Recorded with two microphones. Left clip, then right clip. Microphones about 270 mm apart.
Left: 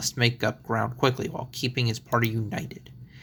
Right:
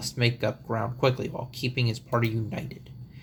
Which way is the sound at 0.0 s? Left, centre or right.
Left.